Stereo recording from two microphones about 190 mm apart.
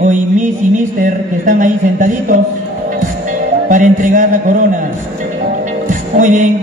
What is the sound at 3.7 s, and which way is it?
Speech, 45° right (ahead or behind).